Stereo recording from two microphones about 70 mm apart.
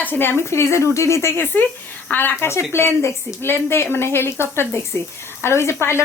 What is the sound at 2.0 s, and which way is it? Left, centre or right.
A woman's voice, left.